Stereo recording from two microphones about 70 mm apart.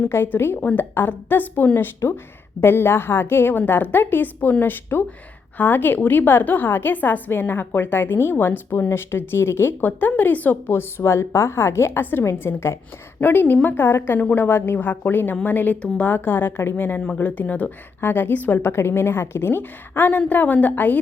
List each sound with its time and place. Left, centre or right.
0.1 s a woman's voice: left
10.7 s a woman's voice: left